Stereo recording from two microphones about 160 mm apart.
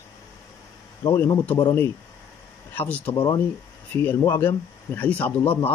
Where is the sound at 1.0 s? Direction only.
15° left (ahead or behind).